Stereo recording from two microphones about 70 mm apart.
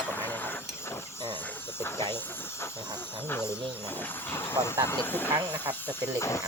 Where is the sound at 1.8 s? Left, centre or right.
Left.